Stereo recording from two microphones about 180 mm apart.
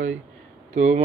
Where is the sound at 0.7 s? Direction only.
40° right (ahead or behind).